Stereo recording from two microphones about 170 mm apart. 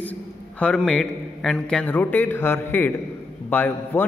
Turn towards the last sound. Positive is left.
turn(degrees=10)  # may be behind; listen again after turning